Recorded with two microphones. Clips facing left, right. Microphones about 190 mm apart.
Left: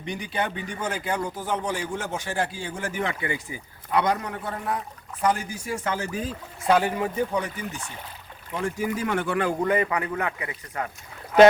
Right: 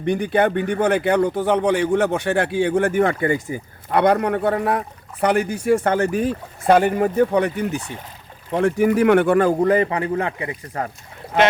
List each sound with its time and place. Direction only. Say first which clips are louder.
0.0 s a man's voice: right 11 dB; 55° right (ahead or behind); by 11.5 s 35° right (ahead or behind)